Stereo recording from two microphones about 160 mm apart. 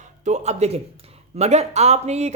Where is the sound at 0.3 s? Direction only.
45° right (ahead or behind).